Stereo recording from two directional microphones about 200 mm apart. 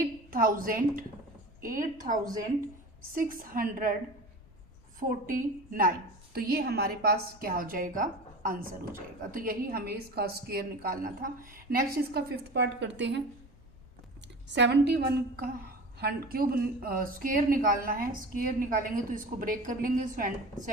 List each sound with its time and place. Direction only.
0.3 s speech: 45° right (ahead or behind)
3.2 s speech: 45° right (ahead or behind)
4.9 s speech: 40° right (ahead or behind); by 13.2 s 60° right (ahead or behind)
14.4 s a woman's voice: 60° right (ahead or behind); by 20.3 s 40° right (ahead or behind)